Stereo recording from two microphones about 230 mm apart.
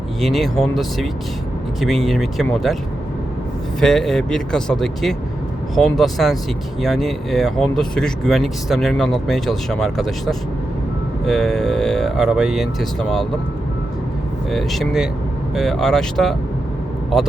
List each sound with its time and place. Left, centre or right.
0.2 s speech: centre
3.8 s speech: centre
14.5 s speech: centre